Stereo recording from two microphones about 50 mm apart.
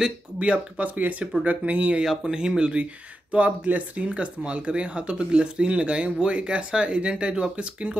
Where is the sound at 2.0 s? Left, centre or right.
Centre.